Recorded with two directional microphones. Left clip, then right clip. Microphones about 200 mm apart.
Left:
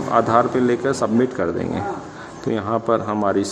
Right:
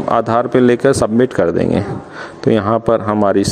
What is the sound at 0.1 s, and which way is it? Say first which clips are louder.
Speech: right 3 dB; 35° right (ahead or behind).